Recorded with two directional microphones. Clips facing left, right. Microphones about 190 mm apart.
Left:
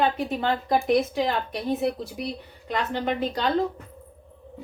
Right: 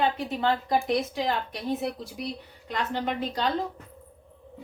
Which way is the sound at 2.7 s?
60° left (ahead or behind).